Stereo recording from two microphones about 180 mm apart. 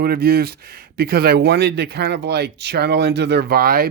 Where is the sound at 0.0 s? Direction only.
60° right (ahead or behind).